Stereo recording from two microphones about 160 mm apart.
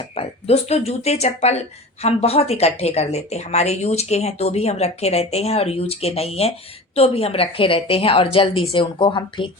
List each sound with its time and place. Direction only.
0.2 s speech: 40° left (ahead or behind)